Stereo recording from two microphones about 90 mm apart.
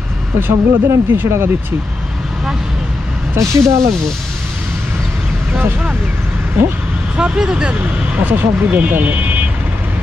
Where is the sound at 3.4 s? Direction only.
35° right (ahead or behind).